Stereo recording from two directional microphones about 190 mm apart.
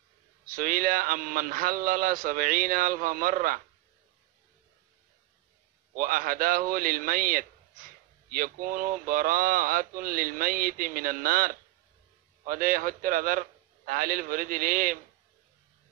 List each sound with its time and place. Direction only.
0.5 s a man's voice: 45° right (ahead or behind)
5.9 s a man's voice: 45° right (ahead or behind)